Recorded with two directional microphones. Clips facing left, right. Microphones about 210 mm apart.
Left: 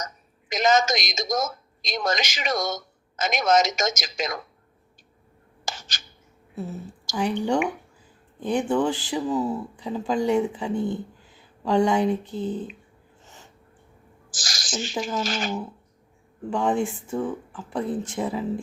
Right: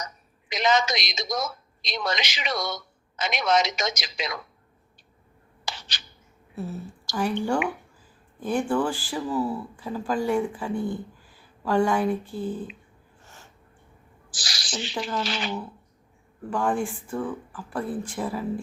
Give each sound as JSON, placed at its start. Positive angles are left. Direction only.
{"t": 0.0, "sound": "speech", "side_deg": 45}
{"t": 5.6, "sound": "a sound", "side_deg": 45}
{"t": 6.6, "sound": "a woman's voice", "side_deg": 15}
{"t": 8.4, "sound": "speech", "side_deg": 20}
{"t": 13.2, "sound": "a sound", "side_deg": 15}
{"t": 14.3, "sound": "speech", "side_deg": 45}
{"t": 16.5, "sound": "speech", "side_deg": 20}